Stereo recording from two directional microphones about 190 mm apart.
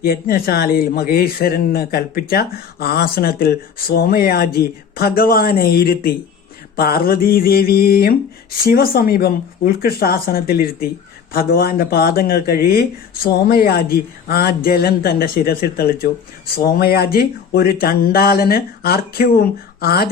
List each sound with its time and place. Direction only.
0.0 s speech: 50° left (ahead or behind)